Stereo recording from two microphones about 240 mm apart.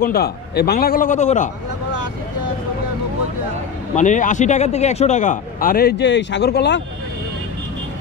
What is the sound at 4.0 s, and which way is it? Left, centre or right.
A man's voice, left.